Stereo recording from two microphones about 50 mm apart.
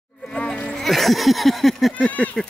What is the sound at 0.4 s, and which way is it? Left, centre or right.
Insect, centre.